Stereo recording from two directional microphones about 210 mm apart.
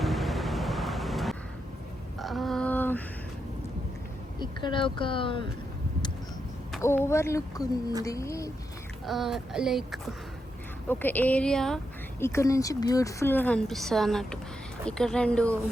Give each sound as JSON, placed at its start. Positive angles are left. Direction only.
{"t": 0.0, "sound": "vehicle", "side_deg": 0}
{"t": 2.1, "sound": "a sound", "side_deg": 0}
{"t": 4.4, "sound": "speech", "side_deg": 20}
{"t": 6.8, "sound": "a woman's voice", "side_deg": 10}
{"t": 9.0, "sound": "speech", "side_deg": 0}
{"t": 10.8, "sound": "a woman's voice", "side_deg": 10}
{"t": 12.2, "sound": "a woman's voice", "side_deg": 15}